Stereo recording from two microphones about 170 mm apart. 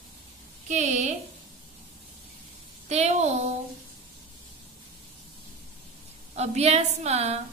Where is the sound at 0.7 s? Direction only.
45° right (ahead or behind).